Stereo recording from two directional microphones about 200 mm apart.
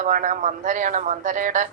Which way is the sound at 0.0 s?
40° right (ahead or behind).